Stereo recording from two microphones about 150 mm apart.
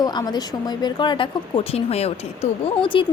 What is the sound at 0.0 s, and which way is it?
A woman's voice, 25° left (ahead or behind).